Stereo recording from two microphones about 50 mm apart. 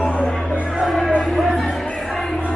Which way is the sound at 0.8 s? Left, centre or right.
Centre.